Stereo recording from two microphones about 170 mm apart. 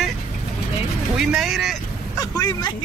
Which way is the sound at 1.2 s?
5° right (ahead or behind).